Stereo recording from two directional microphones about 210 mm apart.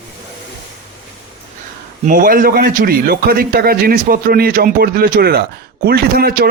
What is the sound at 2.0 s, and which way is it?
A man's voice, 40° right (ahead or behind).